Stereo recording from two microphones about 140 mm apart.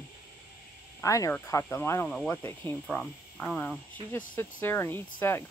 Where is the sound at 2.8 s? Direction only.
5° left (ahead or behind).